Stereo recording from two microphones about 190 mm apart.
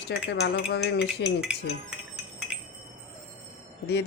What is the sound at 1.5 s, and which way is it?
Cutlery, 5° right (ahead or behind).